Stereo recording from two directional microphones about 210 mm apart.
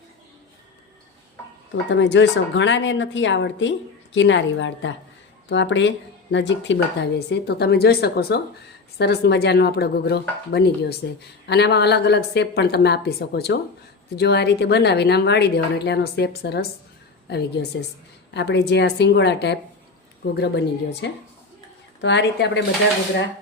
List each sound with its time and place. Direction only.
1.7 s a woman's voice: 60° left (ahead or behind)